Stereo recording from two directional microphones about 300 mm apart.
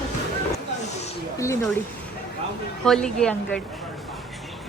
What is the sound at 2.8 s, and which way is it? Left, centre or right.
Speech, centre.